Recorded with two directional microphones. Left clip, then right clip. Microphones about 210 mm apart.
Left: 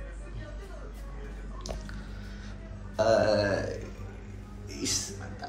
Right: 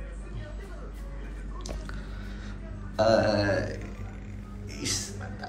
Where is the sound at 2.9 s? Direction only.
15° left (ahead or behind).